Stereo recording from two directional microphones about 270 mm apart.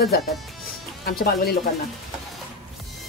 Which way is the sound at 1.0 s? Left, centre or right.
Left.